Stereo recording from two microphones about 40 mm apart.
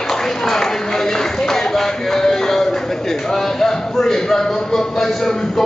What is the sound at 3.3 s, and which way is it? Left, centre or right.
A man's voice, centre.